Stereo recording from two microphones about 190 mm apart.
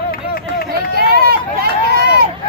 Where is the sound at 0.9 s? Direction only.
55° right (ahead or behind).